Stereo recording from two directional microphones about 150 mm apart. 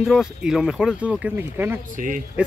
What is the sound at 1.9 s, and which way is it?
Speech, 60° right (ahead or behind).